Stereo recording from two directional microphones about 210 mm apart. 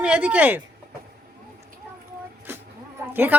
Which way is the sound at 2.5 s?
10° right (ahead or behind).